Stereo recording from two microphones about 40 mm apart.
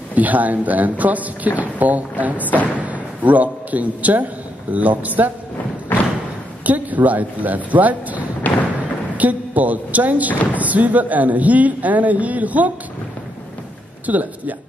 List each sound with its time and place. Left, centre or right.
0.1 s speech: right
5.9 s thump: left
6.6 s speech: right
8.5 s music: left
9.1 s speech: right
14.0 s speech: right